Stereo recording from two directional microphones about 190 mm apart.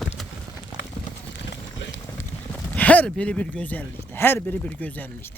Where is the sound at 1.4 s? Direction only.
70° left (ahead or behind).